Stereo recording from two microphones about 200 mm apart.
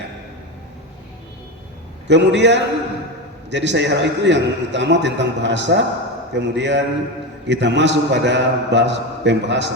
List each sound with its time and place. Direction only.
2.0 s a man's voice: 60° right (ahead or behind)